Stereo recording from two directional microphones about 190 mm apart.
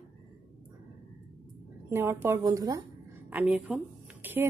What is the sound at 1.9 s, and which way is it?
A woman's voice, 10° right (ahead or behind).